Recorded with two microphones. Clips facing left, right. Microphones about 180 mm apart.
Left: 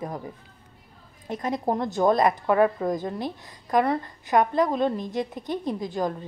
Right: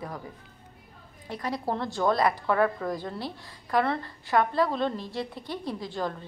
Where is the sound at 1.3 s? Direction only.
20° left (ahead or behind).